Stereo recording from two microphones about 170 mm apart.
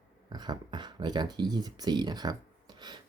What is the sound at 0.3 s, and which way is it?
Speech, 25° right (ahead or behind).